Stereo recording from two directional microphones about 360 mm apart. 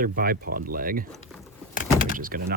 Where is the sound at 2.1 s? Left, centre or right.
Right.